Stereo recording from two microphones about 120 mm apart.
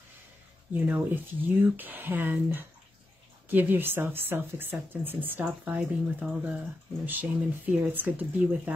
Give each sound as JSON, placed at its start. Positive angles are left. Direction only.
{"t": 0.7, "sound": "speech", "side_deg": -15}